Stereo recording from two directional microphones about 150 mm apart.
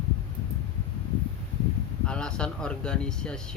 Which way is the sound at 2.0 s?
5° left (ahead or behind).